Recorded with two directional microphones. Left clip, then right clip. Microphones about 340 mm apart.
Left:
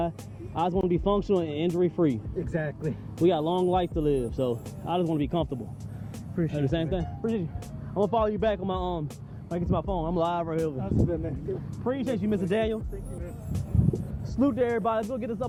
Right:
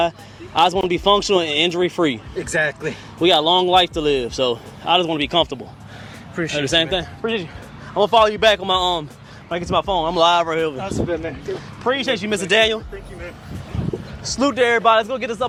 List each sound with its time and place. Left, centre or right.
0.5 s speech: centre
14.3 s speech: centre